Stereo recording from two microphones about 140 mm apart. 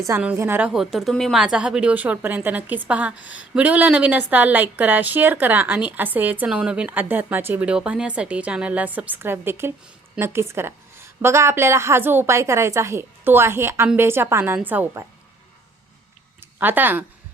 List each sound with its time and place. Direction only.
0.3 s speech: 15° right (ahead or behind)
0.7 s speech: centre (ahead or behind)
16.4 s speech: 15° right (ahead or behind)